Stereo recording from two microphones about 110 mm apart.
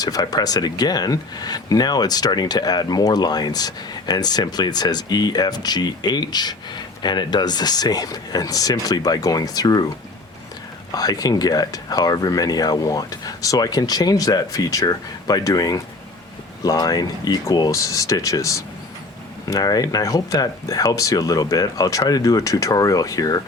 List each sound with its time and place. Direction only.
0.0 s speech: 35° left (ahead or behind)
10.9 s speech: 35° left (ahead or behind)